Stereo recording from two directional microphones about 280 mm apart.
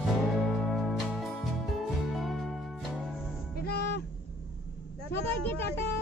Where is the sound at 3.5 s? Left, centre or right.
Left.